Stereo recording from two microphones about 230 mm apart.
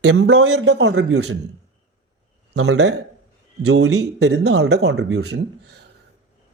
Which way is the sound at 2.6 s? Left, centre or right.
Right.